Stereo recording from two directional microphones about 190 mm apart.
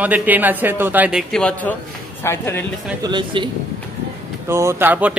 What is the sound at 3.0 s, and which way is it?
Speech, 25° right (ahead or behind).